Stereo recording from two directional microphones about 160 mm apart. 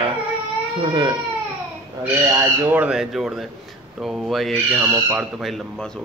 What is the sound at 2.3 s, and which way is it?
Speech, 10° right (ahead or behind).